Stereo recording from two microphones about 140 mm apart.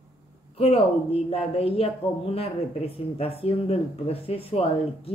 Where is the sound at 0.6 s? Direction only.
45° left (ahead or behind).